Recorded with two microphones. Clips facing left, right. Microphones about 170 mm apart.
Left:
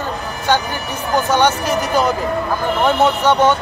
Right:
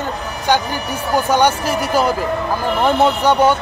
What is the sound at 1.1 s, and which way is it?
A man's voice, 10° right (ahead or behind).